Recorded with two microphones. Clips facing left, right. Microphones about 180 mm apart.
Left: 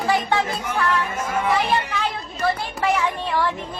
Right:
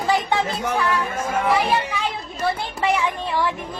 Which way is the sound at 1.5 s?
10° right (ahead or behind).